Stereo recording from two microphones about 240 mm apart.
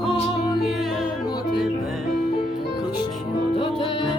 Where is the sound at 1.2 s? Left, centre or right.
Centre.